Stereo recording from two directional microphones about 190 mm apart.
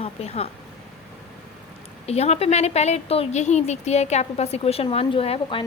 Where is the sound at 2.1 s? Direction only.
35° left (ahead or behind).